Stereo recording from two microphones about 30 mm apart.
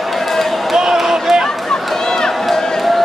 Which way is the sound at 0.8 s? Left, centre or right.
Centre.